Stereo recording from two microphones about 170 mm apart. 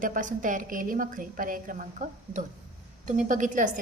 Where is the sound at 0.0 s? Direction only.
50° right (ahead or behind).